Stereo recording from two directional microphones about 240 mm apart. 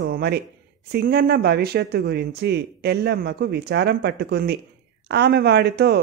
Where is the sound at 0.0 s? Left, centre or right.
Right.